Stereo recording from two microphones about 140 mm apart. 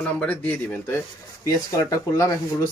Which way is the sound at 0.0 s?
10° left (ahead or behind).